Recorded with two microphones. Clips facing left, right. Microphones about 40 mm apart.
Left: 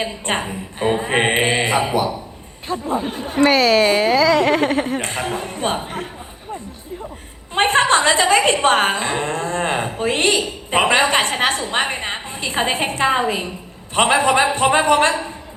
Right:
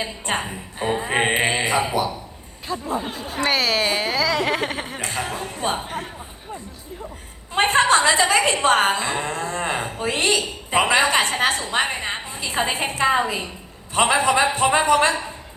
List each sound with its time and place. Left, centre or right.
0.3 s a woman's voice: left
3.4 s speech: centre
4.9 s a woman's voice: left
7.5 s a sound: left
8.6 s a woman's voice: left